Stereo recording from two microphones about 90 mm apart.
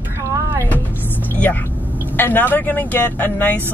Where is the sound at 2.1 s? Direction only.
20° left (ahead or behind).